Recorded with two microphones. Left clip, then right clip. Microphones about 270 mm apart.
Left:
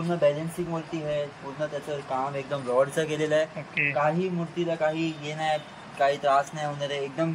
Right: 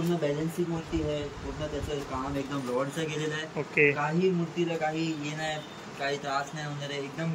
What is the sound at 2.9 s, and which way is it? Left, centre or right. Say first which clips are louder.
Speech: left 7 dB; centre.